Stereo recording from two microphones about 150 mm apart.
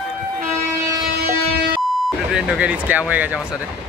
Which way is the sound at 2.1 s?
Centre (ahead or behind).